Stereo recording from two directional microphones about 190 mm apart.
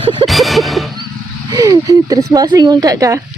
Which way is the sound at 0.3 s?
Centre (ahead or behind).